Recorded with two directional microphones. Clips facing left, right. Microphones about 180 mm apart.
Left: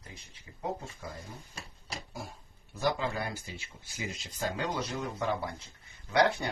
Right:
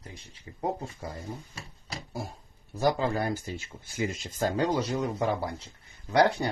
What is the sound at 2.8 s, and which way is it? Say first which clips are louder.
Speech: right 5 dB; 40° right (ahead or behind).